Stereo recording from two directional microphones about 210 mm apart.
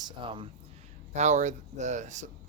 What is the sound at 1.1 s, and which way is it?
Speech, 35° right (ahead or behind).